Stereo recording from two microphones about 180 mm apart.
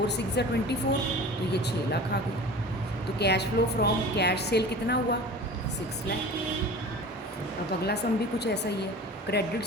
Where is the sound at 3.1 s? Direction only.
65° left (ahead or behind).